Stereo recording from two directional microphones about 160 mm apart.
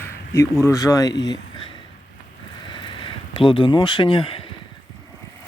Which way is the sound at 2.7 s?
30° left (ahead or behind).